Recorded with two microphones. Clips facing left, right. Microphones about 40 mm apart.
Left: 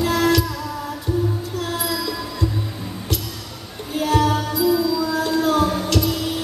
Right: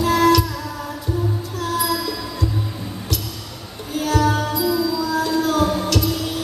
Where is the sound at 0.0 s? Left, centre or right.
Centre.